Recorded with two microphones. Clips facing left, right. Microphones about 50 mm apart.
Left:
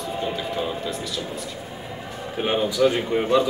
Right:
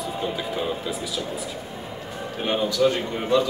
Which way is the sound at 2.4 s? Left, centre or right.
Centre.